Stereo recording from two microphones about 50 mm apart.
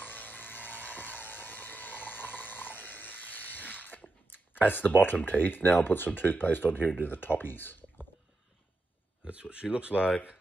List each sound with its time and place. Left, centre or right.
0.1 s a sound: left
5.2 s speech: left
9.2 s speech: right